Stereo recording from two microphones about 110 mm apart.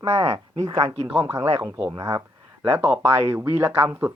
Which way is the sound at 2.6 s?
20° right (ahead or behind).